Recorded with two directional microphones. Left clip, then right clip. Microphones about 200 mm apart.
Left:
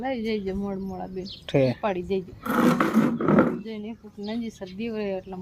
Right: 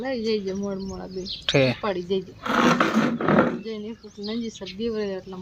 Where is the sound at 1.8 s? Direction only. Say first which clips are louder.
Right 1 dB; 15° left (ahead or behind).